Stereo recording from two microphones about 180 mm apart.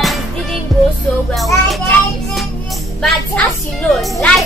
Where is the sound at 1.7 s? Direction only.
Centre (ahead or behind).